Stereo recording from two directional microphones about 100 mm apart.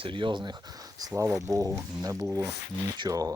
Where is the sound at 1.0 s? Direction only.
35° right (ahead or behind).